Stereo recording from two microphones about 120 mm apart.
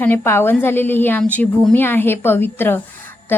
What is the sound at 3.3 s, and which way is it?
Music, 15° left (ahead or behind).